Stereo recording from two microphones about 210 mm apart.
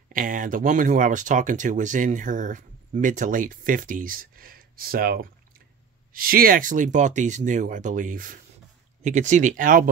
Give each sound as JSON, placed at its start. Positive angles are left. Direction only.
{"t": 0.1, "sound": "speech", "side_deg": -40}